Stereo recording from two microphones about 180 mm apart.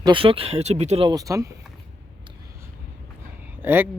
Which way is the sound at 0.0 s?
30° right (ahead or behind).